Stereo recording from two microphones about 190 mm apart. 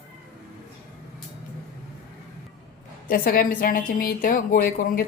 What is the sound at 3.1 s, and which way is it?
Speech, 50° left (ahead or behind).